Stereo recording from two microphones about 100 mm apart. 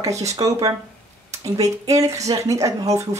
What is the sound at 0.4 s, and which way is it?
Speech, 35° right (ahead or behind).